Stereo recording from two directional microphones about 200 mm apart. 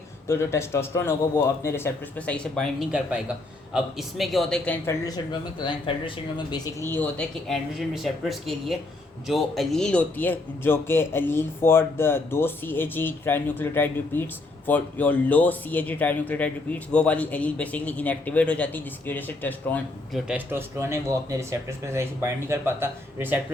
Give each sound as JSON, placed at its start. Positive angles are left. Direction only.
{"t": 0.3, "sound": "speech", "side_deg": 15}
{"t": 5.0, "sound": "speech", "side_deg": 20}
{"t": 20.2, "sound": "speech", "side_deg": -10}